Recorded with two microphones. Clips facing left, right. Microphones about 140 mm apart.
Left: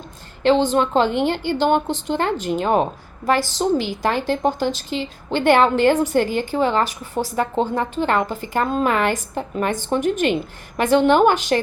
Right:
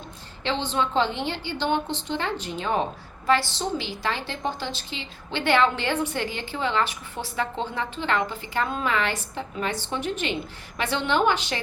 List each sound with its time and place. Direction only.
0.4 s a woman's voice: 45° left (ahead or behind)